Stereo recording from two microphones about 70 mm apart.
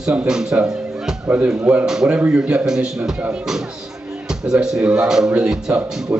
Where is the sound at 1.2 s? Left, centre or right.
Right.